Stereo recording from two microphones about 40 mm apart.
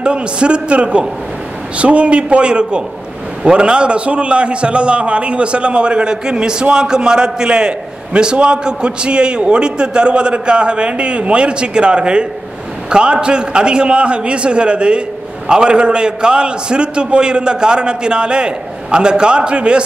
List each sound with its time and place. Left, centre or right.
0.0 s a man's voice: right